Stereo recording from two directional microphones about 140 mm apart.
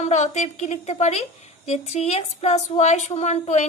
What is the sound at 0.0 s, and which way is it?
A woman's voice, 55° left (ahead or behind).